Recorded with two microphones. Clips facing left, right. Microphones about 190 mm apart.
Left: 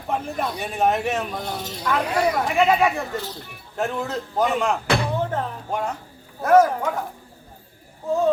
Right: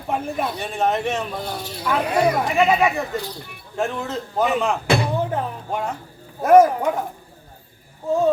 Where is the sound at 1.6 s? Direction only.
10° right (ahead or behind).